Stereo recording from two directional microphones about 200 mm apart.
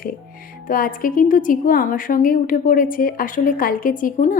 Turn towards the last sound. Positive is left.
turn(degrees=40)  # may be behind; listen again after turning